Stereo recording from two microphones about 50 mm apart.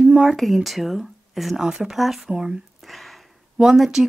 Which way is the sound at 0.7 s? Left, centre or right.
Centre.